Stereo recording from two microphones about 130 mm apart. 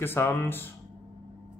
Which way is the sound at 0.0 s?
20° left (ahead or behind).